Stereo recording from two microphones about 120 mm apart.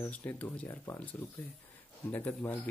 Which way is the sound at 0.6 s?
20° left (ahead or behind).